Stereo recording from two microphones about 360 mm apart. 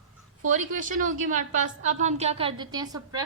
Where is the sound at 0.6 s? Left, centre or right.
Right.